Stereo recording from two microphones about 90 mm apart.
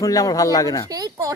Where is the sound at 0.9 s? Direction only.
40° right (ahead or behind).